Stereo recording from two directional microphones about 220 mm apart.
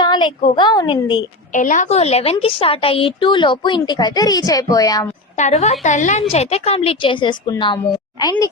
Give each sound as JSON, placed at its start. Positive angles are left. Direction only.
{"t": 0.0, "sound": "a woman's voice", "side_deg": 20}
{"t": 1.5, "sound": "a woman's voice", "side_deg": 35}
{"t": 5.4, "sound": "a woman's voice", "side_deg": 30}